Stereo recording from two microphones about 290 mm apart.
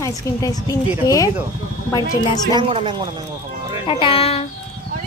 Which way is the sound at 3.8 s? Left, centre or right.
Centre.